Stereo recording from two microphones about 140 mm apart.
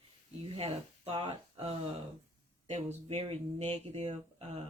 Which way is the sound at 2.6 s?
50° right (ahead or behind).